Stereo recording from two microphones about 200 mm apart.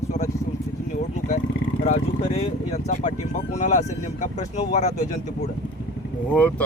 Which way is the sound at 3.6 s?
40° left (ahead or behind).